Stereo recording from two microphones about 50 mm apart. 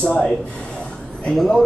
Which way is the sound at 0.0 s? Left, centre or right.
Left.